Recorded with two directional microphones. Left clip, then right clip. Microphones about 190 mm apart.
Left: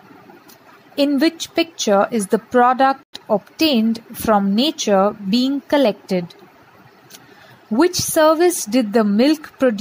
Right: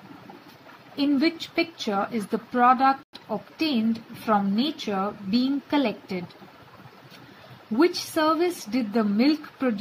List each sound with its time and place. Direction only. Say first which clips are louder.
0.9 s a woman's voice: left 7 dB; 45° left (ahead or behind)
7.7 s a woman's voice: left 7 dB; 45° left (ahead or behind)